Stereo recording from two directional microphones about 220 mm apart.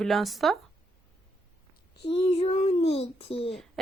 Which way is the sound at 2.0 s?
25° left (ahead or behind).